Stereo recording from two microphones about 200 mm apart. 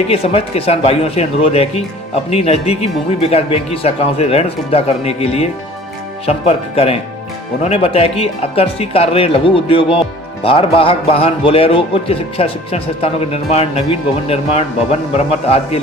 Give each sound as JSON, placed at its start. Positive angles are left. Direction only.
{"t": 0.1, "sound": "a man's voice", "side_deg": 30}